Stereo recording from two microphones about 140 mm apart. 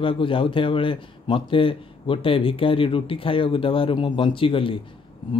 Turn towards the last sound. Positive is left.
turn(degrees=40)  # may be behind; listen again after turning